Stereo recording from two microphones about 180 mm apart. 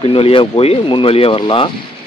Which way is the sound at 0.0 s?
30° left (ahead or behind).